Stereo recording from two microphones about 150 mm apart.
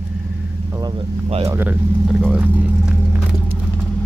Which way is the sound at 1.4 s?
15° right (ahead or behind).